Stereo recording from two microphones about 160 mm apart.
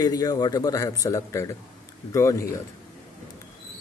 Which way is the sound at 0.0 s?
20° left (ahead or behind).